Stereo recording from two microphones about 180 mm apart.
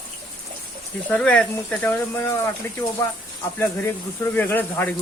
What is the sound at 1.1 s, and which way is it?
Speech, 5° left (ahead or behind).